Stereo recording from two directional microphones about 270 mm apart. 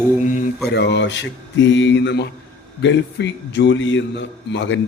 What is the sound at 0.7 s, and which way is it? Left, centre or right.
A man's voice, left.